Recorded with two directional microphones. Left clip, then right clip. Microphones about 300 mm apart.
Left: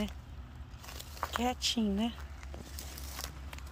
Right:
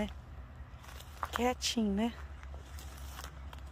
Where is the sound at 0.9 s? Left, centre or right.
Left.